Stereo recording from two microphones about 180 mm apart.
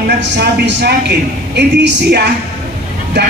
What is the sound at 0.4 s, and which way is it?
A woman's voice, 75° right (ahead or behind).